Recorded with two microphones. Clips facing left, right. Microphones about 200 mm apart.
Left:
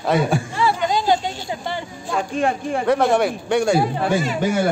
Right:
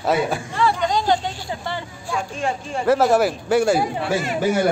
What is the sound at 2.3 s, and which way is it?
Speech, 60° left (ahead or behind).